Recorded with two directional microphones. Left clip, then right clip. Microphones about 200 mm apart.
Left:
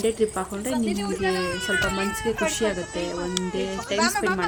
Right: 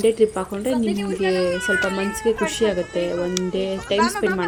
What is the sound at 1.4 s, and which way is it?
Speech, 25° left (ahead or behind).